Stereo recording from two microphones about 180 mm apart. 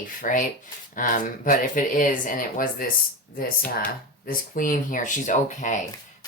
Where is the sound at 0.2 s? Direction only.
45° left (ahead or behind).